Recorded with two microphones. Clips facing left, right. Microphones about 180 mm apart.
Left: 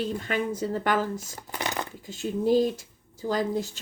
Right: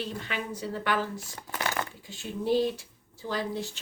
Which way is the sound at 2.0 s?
45° left (ahead or behind).